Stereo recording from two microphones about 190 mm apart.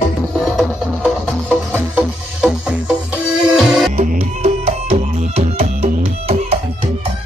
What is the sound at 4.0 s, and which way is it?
Music, 35° right (ahead or behind).